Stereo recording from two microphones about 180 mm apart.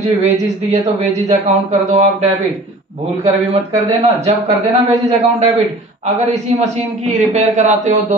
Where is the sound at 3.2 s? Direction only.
35° right (ahead or behind).